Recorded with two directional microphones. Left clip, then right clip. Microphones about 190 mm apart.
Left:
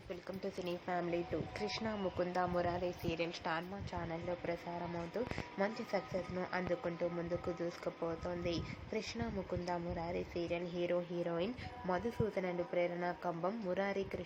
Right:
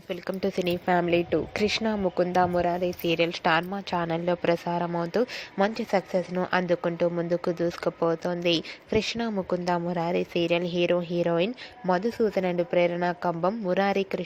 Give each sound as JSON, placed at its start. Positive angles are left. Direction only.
{"t": 0.1, "sound": "a woman's voice", "side_deg": -40}